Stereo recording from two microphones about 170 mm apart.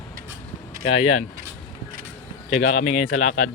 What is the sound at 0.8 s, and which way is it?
Speech, 35° left (ahead or behind).